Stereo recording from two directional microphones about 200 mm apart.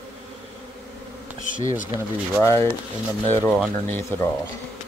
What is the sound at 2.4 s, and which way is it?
Speech, 15° left (ahead or behind).